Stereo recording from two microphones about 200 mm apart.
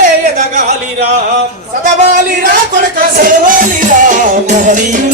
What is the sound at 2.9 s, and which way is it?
Music, 40° right (ahead or behind).